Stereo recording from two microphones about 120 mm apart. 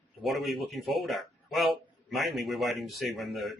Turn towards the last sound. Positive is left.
turn(degrees=0)  # may be behind; listen again after turning